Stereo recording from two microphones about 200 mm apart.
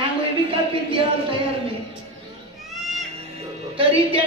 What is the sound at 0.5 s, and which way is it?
A man's voice, 30° right (ahead or behind).